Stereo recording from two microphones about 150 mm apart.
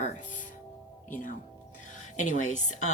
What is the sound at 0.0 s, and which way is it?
Music, 55° left (ahead or behind).